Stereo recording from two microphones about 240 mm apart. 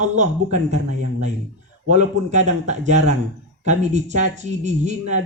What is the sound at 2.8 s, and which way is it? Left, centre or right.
Speech, right.